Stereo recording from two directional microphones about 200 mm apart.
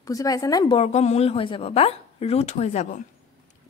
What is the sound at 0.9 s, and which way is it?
A woman's voice, 30° left (ahead or behind).